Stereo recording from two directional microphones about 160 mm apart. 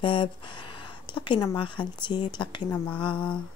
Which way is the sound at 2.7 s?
10° left (ahead or behind).